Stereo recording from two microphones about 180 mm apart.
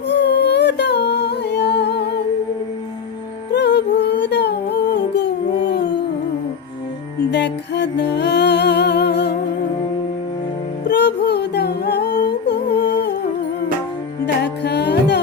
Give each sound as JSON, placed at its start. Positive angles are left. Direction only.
{"t": 0.1, "sound": "humming", "side_deg": 70}
{"t": 3.5, "sound": "music", "side_deg": 70}
{"t": 5.6, "sound": "a sound", "side_deg": 70}
{"t": 7.3, "sound": "music", "side_deg": 70}
{"t": 10.8, "sound": "music", "side_deg": 70}
{"t": 14.4, "sound": "music", "side_deg": 70}